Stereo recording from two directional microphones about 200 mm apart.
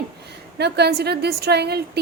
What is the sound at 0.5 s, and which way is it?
A woman's voice, 55° right (ahead or behind).